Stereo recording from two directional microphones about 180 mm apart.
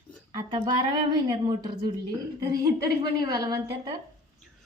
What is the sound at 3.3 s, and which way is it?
Speech, 20° right (ahead or behind).